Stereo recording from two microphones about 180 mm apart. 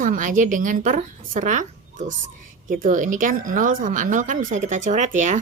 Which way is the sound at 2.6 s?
45° right (ahead or behind).